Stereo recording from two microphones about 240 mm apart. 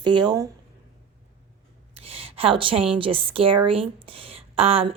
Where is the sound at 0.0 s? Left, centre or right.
Centre.